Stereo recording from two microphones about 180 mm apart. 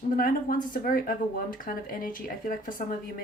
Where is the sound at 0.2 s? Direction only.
50° left (ahead or behind).